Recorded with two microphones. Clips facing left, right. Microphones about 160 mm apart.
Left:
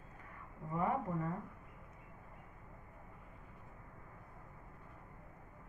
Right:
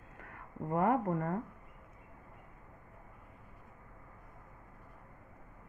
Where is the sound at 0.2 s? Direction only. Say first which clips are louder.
Right 9 dB; 65° right (ahead or behind).